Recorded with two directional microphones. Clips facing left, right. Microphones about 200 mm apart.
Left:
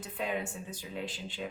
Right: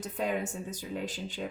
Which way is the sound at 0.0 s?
45° right (ahead or behind).